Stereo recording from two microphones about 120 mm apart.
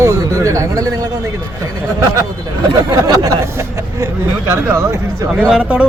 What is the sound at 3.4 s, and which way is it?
A man's voice, 25° right (ahead or behind).